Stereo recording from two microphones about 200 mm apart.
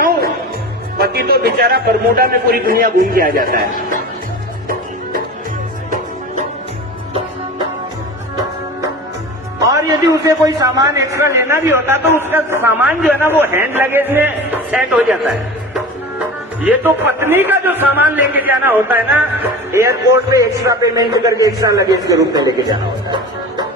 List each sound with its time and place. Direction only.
0.9 s a man's voice: 50° right (ahead or behind)
9.6 s a man's voice: 15° right (ahead or behind)
16.6 s a man's voice: 10° right (ahead or behind)
23.0 s music: 20° right (ahead or behind)